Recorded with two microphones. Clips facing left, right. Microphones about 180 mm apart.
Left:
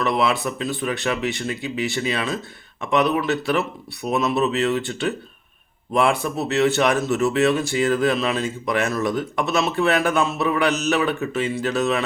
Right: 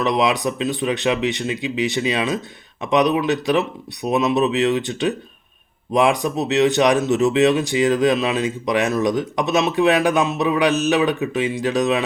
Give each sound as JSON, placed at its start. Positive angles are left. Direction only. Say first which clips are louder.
{"t": 0.0, "sound": "speech", "louder": "right 2 dB", "side_deg": -20}